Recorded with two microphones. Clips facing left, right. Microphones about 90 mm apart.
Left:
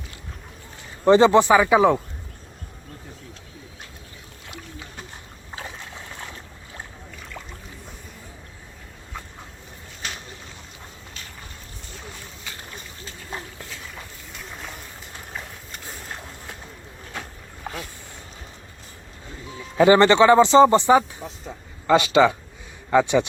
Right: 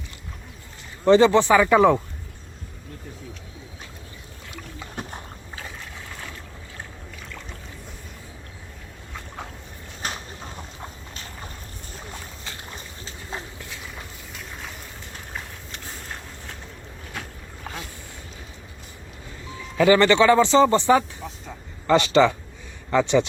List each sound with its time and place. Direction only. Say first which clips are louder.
1.0 s speech: left 1 dB; 20° left (ahead or behind); by 2.0 s 5° left (ahead or behind)
5.5 s boat: left 3 dB; 20° left (ahead or behind)
10.0 s a sound: right 3 dB; 40° right (ahead or behind)
14.3 s boat: left 1 dB; centre (ahead or behind)
19.7 s speech: left 2 dB; 25° left (ahead or behind)